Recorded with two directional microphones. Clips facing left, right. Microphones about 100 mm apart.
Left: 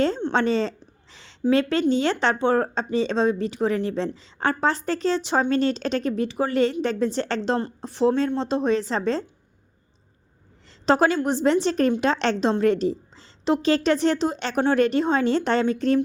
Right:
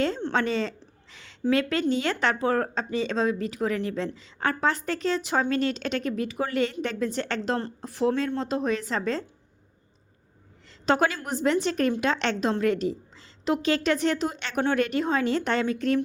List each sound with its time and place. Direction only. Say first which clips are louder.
0.3 s a woman's voice: left 4 dB; 30° left (ahead or behind)
10.8 s a woman's voice: left 5 dB; 30° left (ahead or behind)